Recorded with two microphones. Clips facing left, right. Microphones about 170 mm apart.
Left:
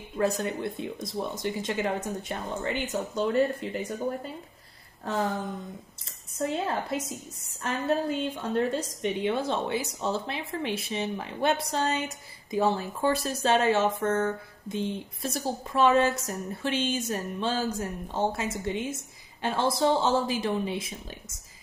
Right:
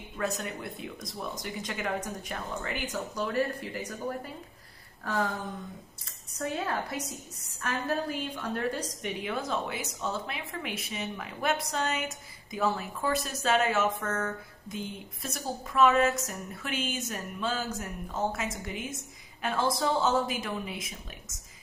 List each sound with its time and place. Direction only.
0.2 s a woman's voice: 30° left (ahead or behind)
6.3 s a woman's voice: 25° left (ahead or behind)